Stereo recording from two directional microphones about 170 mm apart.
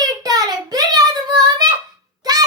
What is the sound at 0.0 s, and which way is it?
Child singing, 20° right (ahead or behind).